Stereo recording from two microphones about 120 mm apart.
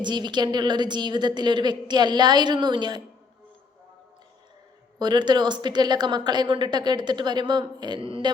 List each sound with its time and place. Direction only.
0.0 s a woman's voice: 40° right (ahead or behind)
4.9 s a woman's voice: 35° right (ahead or behind)